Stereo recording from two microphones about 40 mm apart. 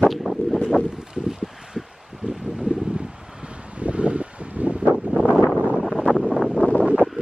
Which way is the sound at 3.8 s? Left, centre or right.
Right.